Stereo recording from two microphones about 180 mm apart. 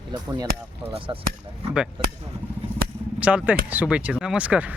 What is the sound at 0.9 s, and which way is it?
Speech, 30° right (ahead or behind).